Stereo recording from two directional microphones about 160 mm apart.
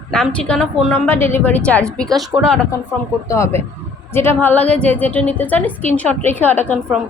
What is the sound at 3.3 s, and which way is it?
A woman's voice, 20° left (ahead or behind).